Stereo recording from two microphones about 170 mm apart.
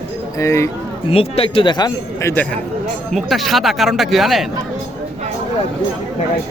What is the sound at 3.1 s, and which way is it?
Speech, centre (ahead or behind).